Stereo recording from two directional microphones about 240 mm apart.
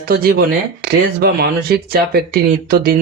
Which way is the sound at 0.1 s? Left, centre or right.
Right.